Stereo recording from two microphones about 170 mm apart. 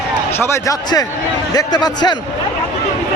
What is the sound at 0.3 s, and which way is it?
A man's voice, 15° left (ahead or behind).